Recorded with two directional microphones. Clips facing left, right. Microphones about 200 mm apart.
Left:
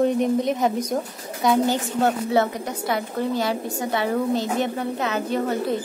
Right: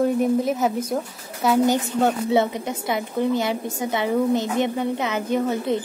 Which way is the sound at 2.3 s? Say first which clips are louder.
Right 1 dB; 15° right (ahead or behind).